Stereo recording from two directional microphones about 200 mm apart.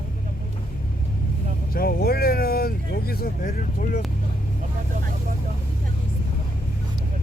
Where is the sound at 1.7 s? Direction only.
50° left (ahead or behind).